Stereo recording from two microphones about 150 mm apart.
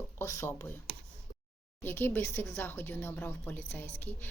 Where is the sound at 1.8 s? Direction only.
15° left (ahead or behind).